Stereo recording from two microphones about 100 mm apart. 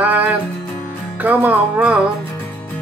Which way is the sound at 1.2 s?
15° right (ahead or behind).